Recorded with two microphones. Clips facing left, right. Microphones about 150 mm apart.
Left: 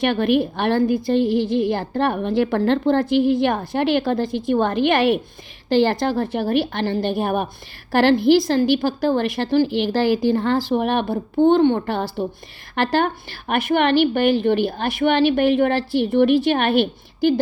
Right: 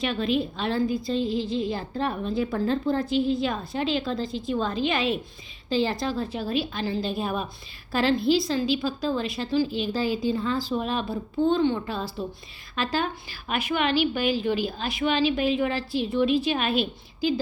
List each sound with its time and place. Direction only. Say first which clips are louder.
0.0 s a woman's voice: left 7 dB; 65° left (ahead or behind)